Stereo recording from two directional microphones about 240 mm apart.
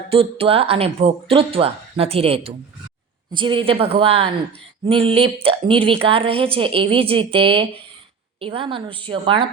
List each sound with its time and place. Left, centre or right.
0.1 s a woman's voice: right